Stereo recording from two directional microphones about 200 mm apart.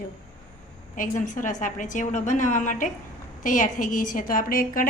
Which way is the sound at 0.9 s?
40° left (ahead or behind).